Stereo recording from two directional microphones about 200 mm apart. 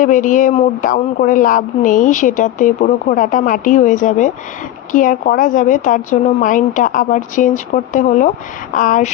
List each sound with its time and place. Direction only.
0.0 s a woman's voice: 40° left (ahead or behind)